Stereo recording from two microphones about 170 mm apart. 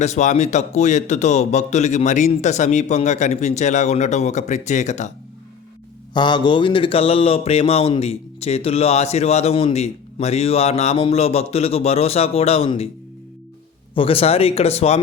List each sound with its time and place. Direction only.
0.0 s a man's voice: 40° left (ahead or behind)
6.1 s speech: 25° left (ahead or behind)
13.9 s speech: 35° left (ahead or behind)